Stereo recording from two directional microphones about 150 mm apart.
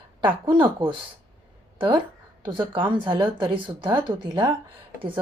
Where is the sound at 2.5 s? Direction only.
35° right (ahead or behind).